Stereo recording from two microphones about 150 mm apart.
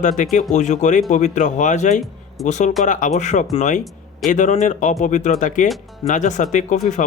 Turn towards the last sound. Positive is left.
turn(degrees=55)  # may be behind; listen again after turning